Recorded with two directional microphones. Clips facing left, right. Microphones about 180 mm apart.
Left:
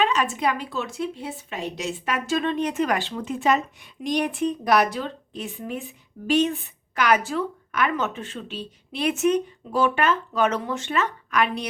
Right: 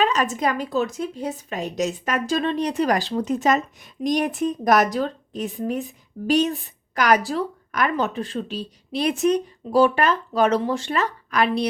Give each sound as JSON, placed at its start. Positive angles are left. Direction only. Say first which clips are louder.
{"t": 0.0, "sound": "a woman's voice", "louder": "right 1 dB", "side_deg": -40}